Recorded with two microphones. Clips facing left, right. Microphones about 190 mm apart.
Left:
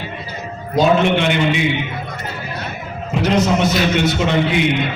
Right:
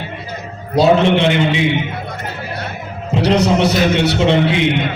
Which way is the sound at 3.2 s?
35° right (ahead or behind).